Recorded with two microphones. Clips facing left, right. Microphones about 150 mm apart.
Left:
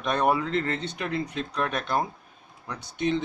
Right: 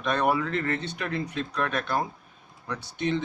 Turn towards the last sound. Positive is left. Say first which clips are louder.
# left 1 dB
turn(degrees=15)  # may be behind; listen again after turning